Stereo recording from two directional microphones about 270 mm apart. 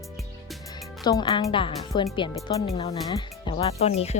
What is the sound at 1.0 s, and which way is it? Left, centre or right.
Speech, centre.